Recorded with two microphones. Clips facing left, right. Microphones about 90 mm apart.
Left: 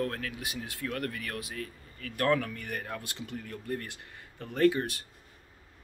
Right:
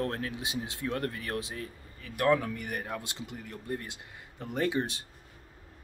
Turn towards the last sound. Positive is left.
turn(degrees=-20)  # may be behind; listen again after turning